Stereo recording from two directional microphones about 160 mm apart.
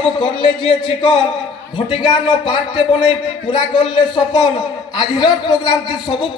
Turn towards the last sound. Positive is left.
turn(degrees=30)  # may be behind; listen again after turning